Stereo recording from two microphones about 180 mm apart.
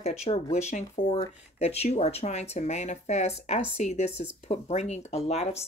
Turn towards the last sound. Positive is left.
turn(degrees=35)  # may be behind; listen again after turning